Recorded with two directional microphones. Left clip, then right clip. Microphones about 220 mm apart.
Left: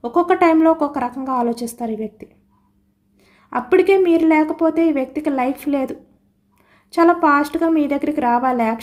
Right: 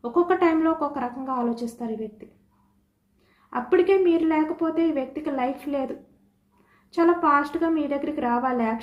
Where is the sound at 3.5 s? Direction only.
55° left (ahead or behind).